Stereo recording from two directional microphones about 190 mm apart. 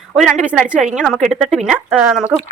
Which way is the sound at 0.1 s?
Centre (ahead or behind).